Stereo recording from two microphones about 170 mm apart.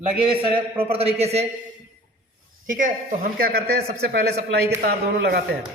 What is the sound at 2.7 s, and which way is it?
Speech, 55° right (ahead or behind).